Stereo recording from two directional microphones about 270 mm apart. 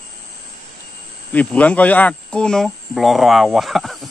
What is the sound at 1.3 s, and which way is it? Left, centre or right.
Speech, centre.